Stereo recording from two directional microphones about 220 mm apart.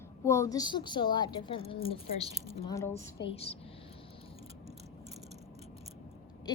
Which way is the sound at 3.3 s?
25° left (ahead or behind).